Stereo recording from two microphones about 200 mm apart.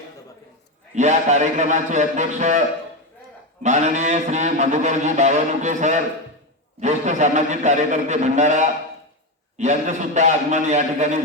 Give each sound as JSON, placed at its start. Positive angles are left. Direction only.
{"t": 0.9, "sound": "a man's voice", "side_deg": -35}